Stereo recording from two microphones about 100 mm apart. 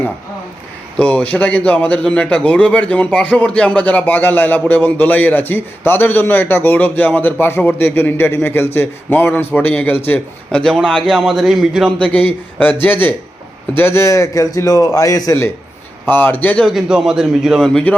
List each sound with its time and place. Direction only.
0.9 s a man's voice: 10° left (ahead or behind)
10.1 s a man's voice: 10° left (ahead or behind)
11.9 s a man's voice: 15° left (ahead or behind); by 15.4 s 35° left (ahead or behind)
16.0 s a man's voice: 20° left (ahead or behind)
16.6 s a man's voice: 5° right (ahead or behind)
17.6 s a man's voice: 5° left (ahead or behind)